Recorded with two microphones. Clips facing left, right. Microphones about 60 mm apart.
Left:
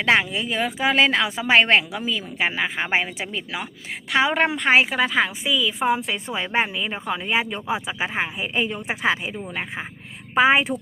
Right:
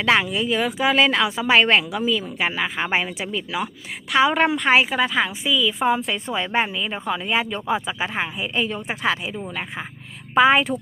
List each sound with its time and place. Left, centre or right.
0.0 s speech: left
10.3 s speech: centre